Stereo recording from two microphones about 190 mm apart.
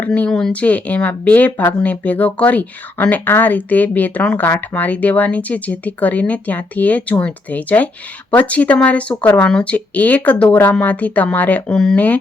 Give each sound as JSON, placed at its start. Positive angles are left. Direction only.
{"t": 0.0, "sound": "speech", "side_deg": 5}